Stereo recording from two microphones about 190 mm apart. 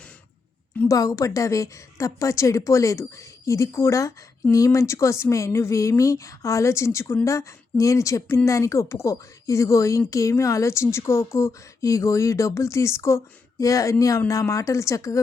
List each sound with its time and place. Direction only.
0.8 s a woman's voice: 15° left (ahead or behind)